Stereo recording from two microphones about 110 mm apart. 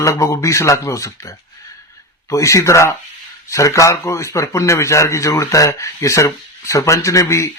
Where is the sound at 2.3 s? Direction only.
30° left (ahead or behind).